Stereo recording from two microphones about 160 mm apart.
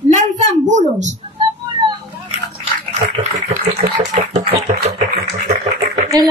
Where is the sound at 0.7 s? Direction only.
50° right (ahead or behind).